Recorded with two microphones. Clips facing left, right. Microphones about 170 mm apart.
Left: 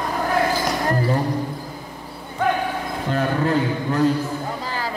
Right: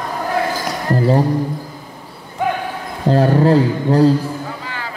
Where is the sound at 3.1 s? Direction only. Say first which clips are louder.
Right 9 dB; 35° right (ahead or behind).